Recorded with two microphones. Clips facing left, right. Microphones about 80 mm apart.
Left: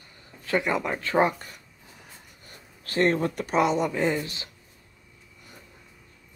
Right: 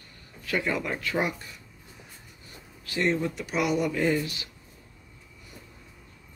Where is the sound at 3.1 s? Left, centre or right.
Left.